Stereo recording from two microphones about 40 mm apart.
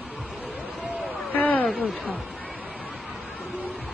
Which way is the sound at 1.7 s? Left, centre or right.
Left.